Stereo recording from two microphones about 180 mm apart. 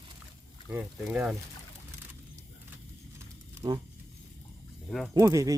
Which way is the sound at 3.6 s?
30° right (ahead or behind).